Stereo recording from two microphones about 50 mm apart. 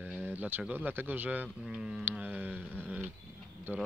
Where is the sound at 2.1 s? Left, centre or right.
Right.